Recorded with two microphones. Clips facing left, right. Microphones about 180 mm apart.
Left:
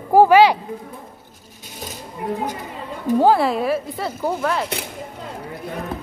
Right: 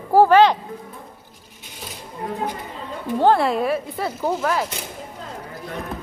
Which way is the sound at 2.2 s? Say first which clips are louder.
Left 4 dB; 15° left (ahead or behind).